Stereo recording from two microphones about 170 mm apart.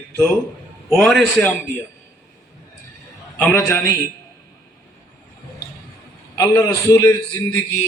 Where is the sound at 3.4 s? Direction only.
10° left (ahead or behind).